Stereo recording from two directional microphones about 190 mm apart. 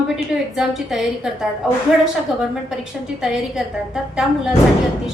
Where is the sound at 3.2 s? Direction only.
5° right (ahead or behind).